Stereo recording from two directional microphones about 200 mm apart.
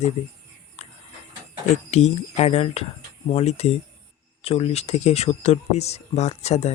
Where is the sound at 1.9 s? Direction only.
35° left (ahead or behind).